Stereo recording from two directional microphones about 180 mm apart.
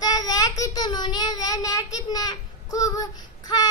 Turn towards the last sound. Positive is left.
turn(degrees=20)  # may be behind; listen again after turning